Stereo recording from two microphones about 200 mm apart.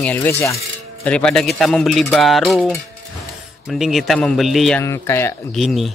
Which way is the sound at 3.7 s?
Centre (ahead or behind).